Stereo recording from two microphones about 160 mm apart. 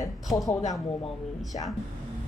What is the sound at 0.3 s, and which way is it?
Speech, centre (ahead or behind).